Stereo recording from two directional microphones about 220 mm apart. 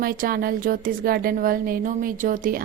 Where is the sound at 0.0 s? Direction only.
40° right (ahead or behind).